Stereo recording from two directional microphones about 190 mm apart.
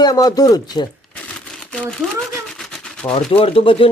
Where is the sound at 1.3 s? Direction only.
5° left (ahead or behind).